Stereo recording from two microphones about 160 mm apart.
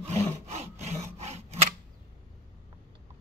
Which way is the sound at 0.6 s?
40° right (ahead or behind).